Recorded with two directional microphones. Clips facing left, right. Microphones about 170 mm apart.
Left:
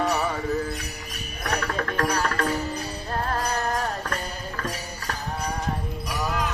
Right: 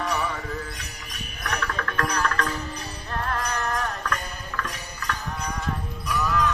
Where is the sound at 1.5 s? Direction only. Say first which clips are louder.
Left 3 dB; 35° left (ahead or behind).